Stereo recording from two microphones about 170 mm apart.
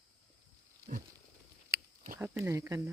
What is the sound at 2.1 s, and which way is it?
Speech, 15° right (ahead or behind).